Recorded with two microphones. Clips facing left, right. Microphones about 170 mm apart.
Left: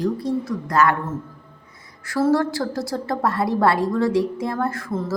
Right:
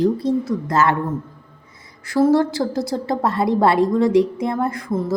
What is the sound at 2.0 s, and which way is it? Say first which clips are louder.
A woman's voice: right 4 dB; 20° right (ahead or behind).